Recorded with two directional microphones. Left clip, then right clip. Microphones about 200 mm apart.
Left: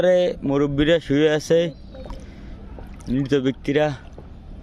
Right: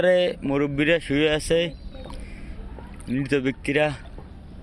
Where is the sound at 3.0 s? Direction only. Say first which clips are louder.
Left 3 dB; 20° left (ahead or behind).